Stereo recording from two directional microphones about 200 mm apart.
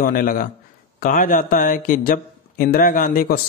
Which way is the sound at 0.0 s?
45° left (ahead or behind).